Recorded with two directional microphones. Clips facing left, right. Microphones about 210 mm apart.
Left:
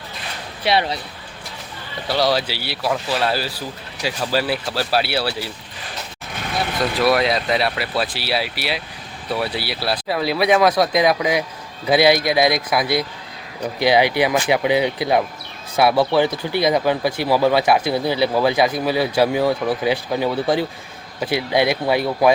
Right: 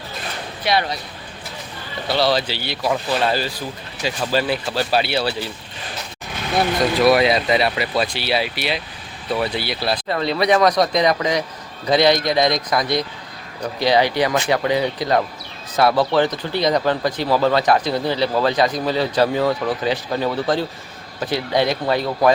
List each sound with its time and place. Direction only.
0.6 s speech: 30° left (ahead or behind)
2.0 s speech: 10° left (ahead or behind)
6.7 s speech: centre (ahead or behind)